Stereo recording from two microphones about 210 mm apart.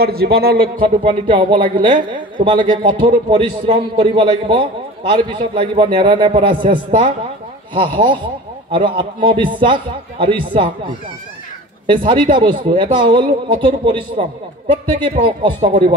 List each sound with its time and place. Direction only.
0.0 s speech: 45° right (ahead or behind)
0.7 s a woman's voice: 25° right (ahead or behind)
12.6 s a woman's voice: 25° right (ahead or behind)